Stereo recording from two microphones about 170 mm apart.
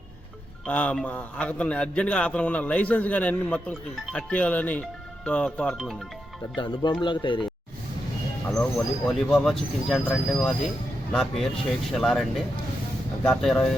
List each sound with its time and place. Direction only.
0.7 s a man's voice: 10° left (ahead or behind)
6.6 s speech: 30° left (ahead or behind)
8.4 s a man's voice: 10° left (ahead or behind)
13.2 s speech: 5° left (ahead or behind)